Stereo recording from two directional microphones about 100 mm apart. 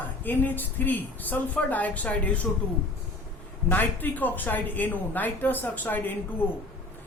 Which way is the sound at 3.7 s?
20° left (ahead or behind).